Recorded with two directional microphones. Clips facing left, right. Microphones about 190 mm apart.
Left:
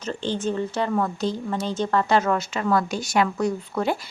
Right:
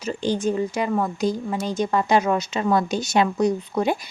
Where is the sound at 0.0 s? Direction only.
10° right (ahead or behind).